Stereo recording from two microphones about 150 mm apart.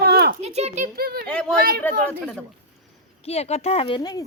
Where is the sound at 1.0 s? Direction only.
90° right.